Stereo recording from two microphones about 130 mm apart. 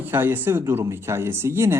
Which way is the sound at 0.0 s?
15° right (ahead or behind).